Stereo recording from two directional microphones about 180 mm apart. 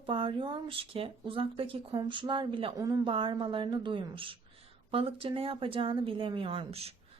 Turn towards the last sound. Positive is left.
turn(degrees=-35)  # may be behind; listen again after turning